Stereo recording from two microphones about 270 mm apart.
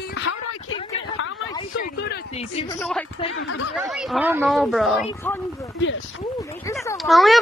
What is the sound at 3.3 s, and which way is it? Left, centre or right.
Speech, left.